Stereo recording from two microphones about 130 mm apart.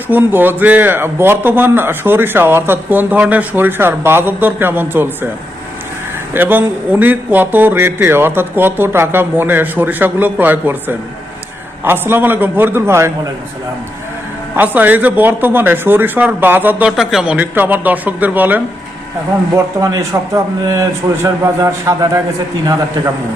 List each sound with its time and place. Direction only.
0.1 s a man's voice: 15° right (ahead or behind)
6.3 s a man's voice: 15° right (ahead or behind)
14.5 s a man's voice: 15° right (ahead or behind)
17.0 s a man's voice: 5° right (ahead or behind)
19.5 s a man's voice: 25° right (ahead or behind)